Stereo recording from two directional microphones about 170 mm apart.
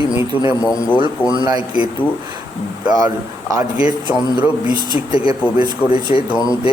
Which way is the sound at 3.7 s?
10° right (ahead or behind).